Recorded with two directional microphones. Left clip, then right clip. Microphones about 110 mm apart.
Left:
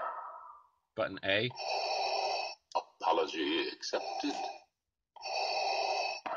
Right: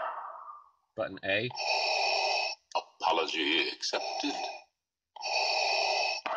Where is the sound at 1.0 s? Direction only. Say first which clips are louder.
Right 1 dB; 15° right (ahead or behind).